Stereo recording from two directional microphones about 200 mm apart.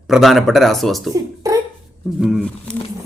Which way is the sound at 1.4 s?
15° right (ahead or behind).